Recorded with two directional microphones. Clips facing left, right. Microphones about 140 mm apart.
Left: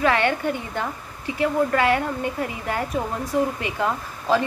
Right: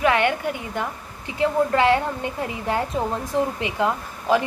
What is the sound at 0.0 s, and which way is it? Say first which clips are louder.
Speech: even; 15° right (ahead or behind).